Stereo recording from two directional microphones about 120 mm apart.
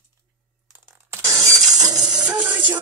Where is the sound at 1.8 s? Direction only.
35° right (ahead or behind).